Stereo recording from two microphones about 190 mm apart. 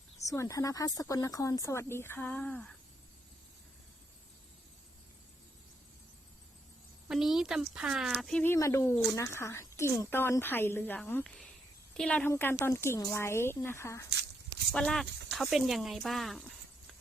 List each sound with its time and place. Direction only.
0.3 s speech: 15° left (ahead or behind)
7.1 s speech: centre (ahead or behind); by 14.0 s 15° left (ahead or behind)
14.7 s speech: 5° left (ahead or behind)